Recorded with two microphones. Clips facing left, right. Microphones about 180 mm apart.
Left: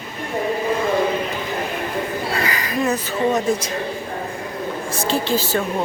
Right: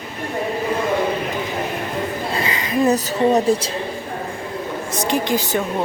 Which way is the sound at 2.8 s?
35° right (ahead or behind).